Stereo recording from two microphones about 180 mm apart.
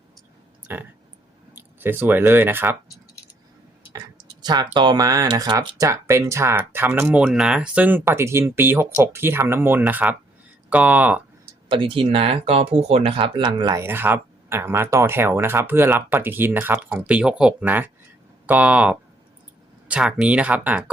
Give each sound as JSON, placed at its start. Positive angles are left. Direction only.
{"t": 0.7, "sound": "speech", "side_deg": -10}
{"t": 4.4, "sound": "speech", "side_deg": -25}
{"t": 11.7, "sound": "speech", "side_deg": -30}
{"t": 13.8, "sound": "speech", "side_deg": -10}